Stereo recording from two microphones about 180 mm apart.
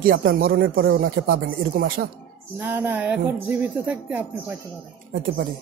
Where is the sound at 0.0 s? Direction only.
55° right (ahead or behind).